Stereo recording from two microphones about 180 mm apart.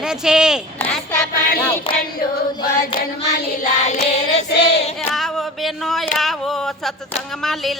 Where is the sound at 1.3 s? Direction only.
55° left (ahead or behind).